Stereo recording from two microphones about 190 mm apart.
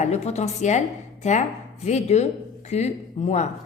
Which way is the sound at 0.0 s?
35° left (ahead or behind).